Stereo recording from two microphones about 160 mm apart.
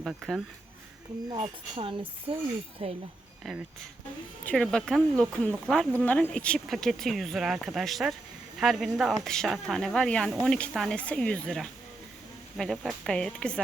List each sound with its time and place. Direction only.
0.0 s speech: centre (ahead or behind)
1.3 s speech: 30° right (ahead or behind)
4.4 s speech: 5° left (ahead or behind)